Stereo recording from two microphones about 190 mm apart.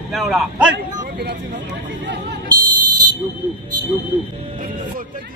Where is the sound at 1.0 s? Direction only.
60° right (ahead or behind).